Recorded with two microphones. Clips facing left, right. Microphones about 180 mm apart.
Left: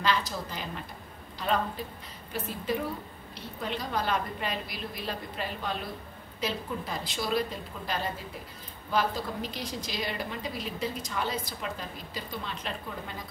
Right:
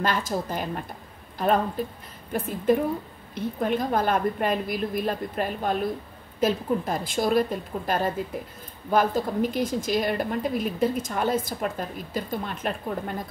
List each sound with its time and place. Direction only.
0.0 s a woman's voice: 50° right (ahead or behind)
2.3 s a woman's voice: 50° right (ahead or behind)